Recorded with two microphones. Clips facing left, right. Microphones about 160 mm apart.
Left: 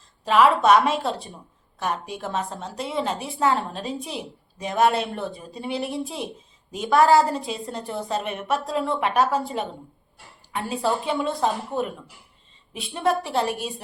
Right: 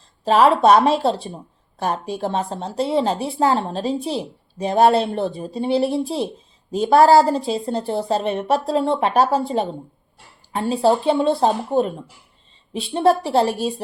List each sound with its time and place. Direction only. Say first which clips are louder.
0.3 s a woman's voice: right 3 dB; 30° right (ahead or behind)